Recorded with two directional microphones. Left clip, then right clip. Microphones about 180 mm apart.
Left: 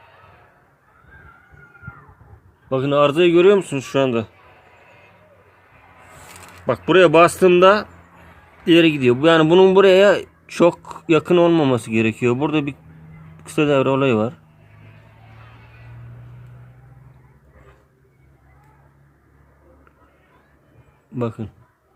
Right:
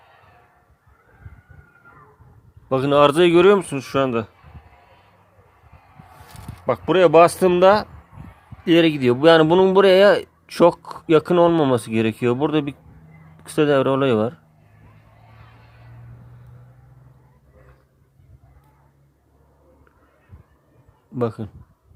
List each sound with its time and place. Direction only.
2.6 s a man's voice: 35° right (ahead or behind); by 4.3 s 15° right (ahead or behind)
6.7 s a man's voice: 10° right (ahead or behind)
21.2 s speech: 20° right (ahead or behind)